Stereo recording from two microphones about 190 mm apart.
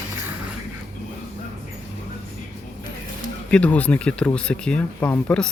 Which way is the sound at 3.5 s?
5° left (ahead or behind).